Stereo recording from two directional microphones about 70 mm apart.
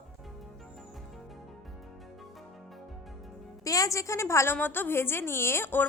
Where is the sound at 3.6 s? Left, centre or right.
Left.